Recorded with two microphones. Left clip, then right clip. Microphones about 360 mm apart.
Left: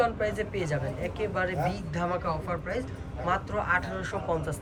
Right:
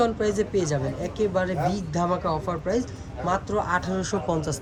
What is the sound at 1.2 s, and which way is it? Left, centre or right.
Speech, centre.